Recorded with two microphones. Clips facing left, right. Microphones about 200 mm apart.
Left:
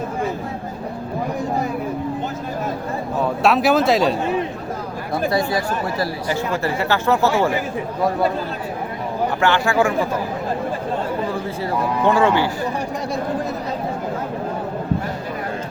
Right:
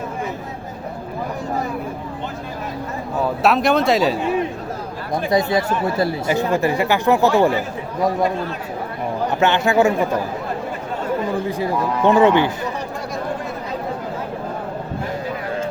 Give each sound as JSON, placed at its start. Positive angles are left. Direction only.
{"t": 3.4, "sound": "speech", "side_deg": 0}
{"t": 5.3, "sound": "a man's voice", "side_deg": -20}
{"t": 9.4, "sound": "a man's voice", "side_deg": -20}
{"t": 11.4, "sound": "a man's voice", "side_deg": -20}